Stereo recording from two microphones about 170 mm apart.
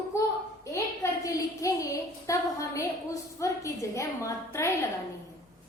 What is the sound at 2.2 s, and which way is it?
A woman's voice, 20° left (ahead or behind).